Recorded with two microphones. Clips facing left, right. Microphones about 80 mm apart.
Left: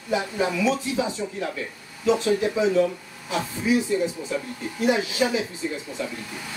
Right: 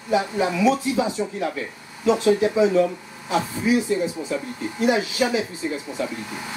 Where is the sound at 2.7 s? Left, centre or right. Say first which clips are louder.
Right 2 dB; right.